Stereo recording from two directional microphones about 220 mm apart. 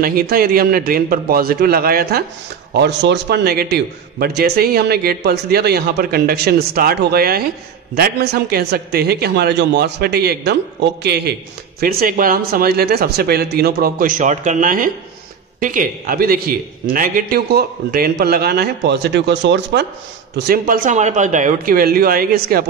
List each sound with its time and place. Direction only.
0.0 s a man's voice: 40° right (ahead or behind)